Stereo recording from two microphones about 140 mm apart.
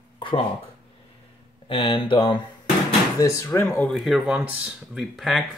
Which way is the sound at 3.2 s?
20° left (ahead or behind).